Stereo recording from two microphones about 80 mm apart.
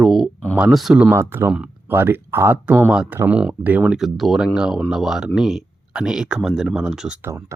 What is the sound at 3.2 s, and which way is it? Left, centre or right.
Speech, centre.